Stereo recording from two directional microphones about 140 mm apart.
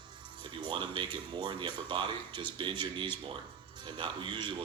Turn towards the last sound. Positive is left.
turn(degrees=-35)  # may be behind; listen again after turning